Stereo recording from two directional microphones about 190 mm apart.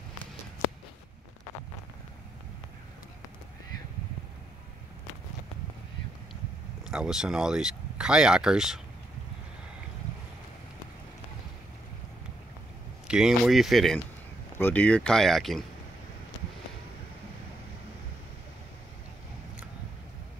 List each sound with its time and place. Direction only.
6.9 s speech: 5° right (ahead or behind)
13.1 s speech: centre (ahead or behind)